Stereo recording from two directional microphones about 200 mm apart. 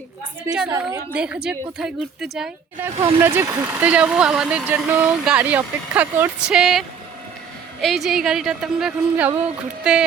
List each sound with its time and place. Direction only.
0.7 s speech: 15° right (ahead or behind)
1.2 s speech: 5° right (ahead or behind)